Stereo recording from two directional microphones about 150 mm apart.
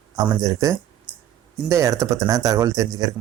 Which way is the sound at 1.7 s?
20° right (ahead or behind).